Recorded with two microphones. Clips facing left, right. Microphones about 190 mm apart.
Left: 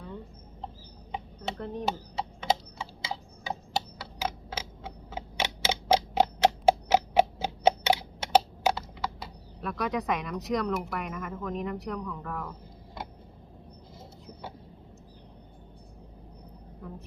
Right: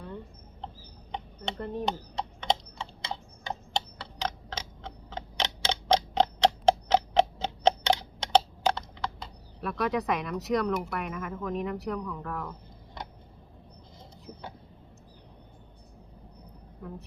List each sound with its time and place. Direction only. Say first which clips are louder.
1.1 s typing: even; centre (ahead or behind)